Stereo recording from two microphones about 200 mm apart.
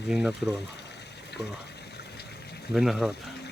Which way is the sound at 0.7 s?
55° left (ahead or behind).